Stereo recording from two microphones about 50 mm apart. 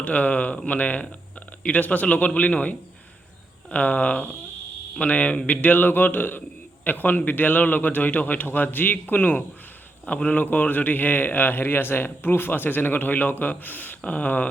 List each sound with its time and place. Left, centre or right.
0.0 s a man's voice: left
10.1 s a man's voice: left